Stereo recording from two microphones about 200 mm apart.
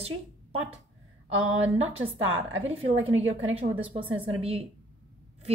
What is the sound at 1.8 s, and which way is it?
A woman's voice, 75° right (ahead or behind).